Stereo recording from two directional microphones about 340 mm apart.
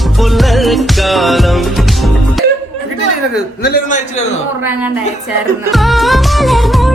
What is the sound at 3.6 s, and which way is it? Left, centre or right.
Speech, left.